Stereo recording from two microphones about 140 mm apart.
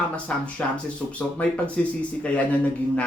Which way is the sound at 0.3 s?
10° left (ahead or behind).